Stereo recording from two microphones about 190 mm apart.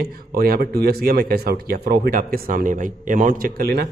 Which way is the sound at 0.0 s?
55° right (ahead or behind).